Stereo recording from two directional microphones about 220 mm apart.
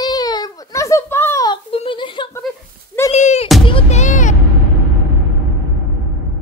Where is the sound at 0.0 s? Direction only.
20° left (ahead or behind).